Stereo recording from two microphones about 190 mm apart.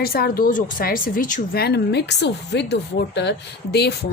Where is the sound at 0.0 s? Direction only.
50° left (ahead or behind).